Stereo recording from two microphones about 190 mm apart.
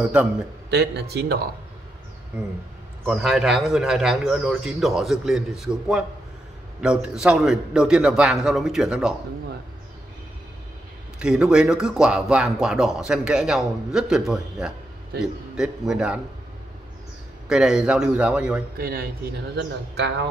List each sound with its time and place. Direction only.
0.0 s a man's voice: 5° right (ahead or behind)
0.7 s speech: 60° right (ahead or behind)
3.1 s a man's voice: centre (ahead or behind)
11.1 s a man's voice: 5° right (ahead or behind)
17.5 s a man's voice: 5° right (ahead or behind)
18.8 s speech: 55° right (ahead or behind)
19.5 s speech: 65° right (ahead or behind)